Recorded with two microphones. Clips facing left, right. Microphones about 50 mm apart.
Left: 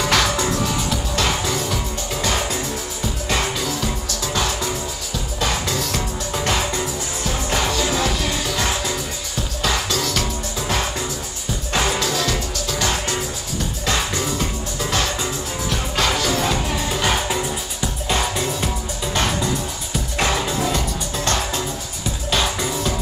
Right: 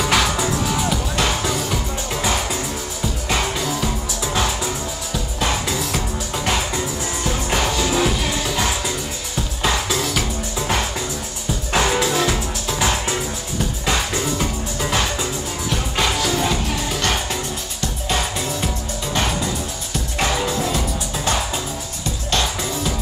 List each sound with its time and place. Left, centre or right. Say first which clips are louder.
0.0 s music: even; centre
3.3 s music: right 1 dB; centre
11.7 s music: right 3 dB; centre
20.2 s music: even; centre